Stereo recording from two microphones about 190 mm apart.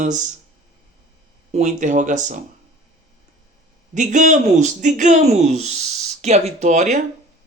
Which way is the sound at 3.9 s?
40° right (ahead or behind).